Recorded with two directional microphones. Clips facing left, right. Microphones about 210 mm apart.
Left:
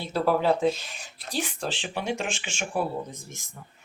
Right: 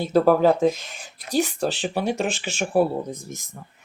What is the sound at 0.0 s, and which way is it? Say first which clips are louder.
Speech: right 7 dB; 45° right (ahead or behind).